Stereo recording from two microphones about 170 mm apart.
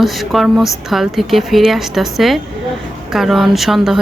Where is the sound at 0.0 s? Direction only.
Centre (ahead or behind).